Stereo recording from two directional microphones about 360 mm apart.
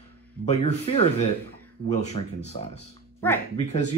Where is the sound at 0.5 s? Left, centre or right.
Centre.